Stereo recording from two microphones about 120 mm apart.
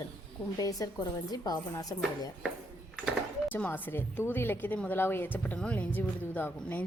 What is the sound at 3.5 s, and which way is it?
A woman's voice, 15° left (ahead or behind).